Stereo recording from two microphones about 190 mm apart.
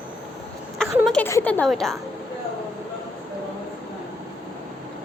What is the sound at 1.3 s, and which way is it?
Speech, 10° left (ahead or behind).